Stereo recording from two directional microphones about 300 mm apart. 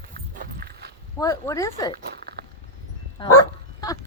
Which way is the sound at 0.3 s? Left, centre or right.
Right.